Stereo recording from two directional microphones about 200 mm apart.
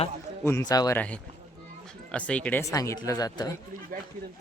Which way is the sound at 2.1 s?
5° left (ahead or behind).